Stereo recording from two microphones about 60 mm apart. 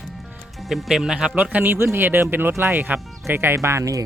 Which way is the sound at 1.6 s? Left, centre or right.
Right.